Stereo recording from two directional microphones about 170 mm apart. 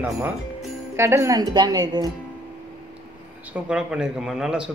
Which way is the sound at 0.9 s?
15° right (ahead or behind).